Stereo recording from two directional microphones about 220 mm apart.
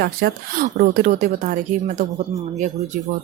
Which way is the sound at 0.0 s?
40° right (ahead or behind).